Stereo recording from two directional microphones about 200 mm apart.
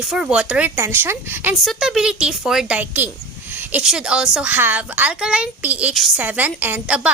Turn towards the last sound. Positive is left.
turn(degrees=-5)  # may be behind; listen again after turning